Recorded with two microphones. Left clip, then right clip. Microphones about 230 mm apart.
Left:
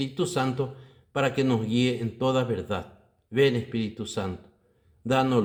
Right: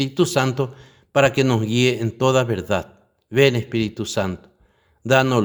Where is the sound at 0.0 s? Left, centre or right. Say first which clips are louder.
Right 8 dB; right.